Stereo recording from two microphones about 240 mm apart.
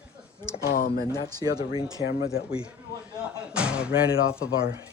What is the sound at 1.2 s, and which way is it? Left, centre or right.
Speech, centre.